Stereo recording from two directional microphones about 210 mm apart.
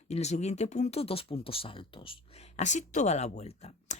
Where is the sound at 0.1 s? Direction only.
30° left (ahead or behind).